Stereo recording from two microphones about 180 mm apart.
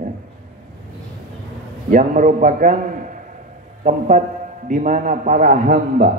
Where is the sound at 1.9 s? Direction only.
45° right (ahead or behind).